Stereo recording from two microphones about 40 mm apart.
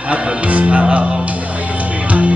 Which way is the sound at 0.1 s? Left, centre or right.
Right.